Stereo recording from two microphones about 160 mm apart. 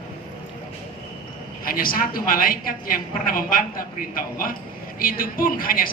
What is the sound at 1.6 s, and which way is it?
A man's voice, 65° left (ahead or behind).